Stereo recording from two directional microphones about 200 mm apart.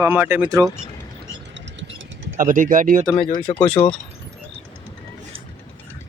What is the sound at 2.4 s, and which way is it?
Speech, 40° right (ahead or behind).